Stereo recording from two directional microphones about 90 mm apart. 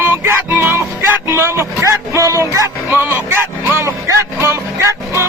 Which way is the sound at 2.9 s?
25° right (ahead or behind).